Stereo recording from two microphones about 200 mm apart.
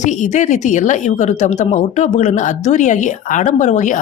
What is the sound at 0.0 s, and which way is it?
Speech, 35° left (ahead or behind).